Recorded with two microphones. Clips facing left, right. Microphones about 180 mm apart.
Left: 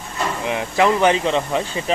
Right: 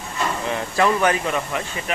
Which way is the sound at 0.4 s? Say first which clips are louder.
Left 3 dB; 15° left (ahead or behind).